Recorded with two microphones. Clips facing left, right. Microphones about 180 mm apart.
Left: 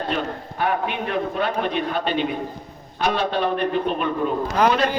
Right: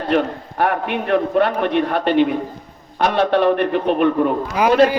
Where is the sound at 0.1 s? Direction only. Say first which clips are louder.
Right 7 dB; 65° right (ahead or behind).